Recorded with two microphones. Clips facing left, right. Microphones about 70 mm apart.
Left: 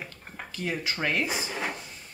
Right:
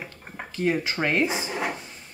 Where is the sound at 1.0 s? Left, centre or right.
Right.